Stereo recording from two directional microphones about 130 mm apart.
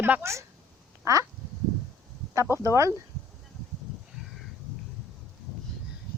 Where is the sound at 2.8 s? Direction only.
25° right (ahead or behind).